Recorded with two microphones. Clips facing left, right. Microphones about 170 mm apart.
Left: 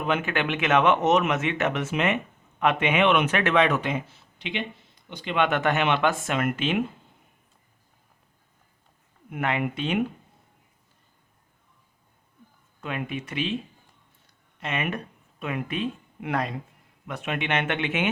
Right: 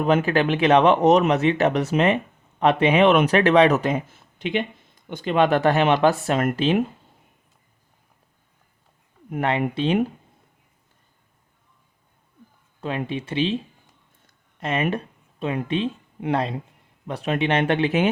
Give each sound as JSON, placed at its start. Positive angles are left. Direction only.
{"t": 0.0, "sound": "speech", "side_deg": -35}
{"t": 9.3, "sound": "speech", "side_deg": -35}
{"t": 12.8, "sound": "speech", "side_deg": -30}
{"t": 14.6, "sound": "speech", "side_deg": -35}